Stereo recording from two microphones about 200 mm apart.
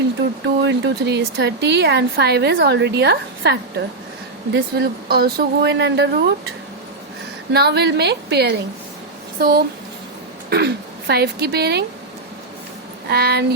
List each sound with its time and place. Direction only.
0.4 s speech: 60° right (ahead or behind)
7.5 s speech: 55° right (ahead or behind)
13.1 s speech: 50° right (ahead or behind)